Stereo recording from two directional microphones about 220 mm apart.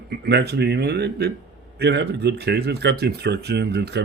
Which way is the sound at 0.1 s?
50° right (ahead or behind).